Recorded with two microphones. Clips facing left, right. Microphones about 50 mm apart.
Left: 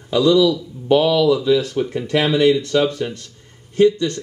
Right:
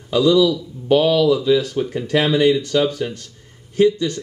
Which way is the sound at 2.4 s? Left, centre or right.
Left.